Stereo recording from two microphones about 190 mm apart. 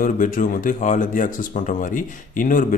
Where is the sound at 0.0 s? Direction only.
45° left (ahead or behind).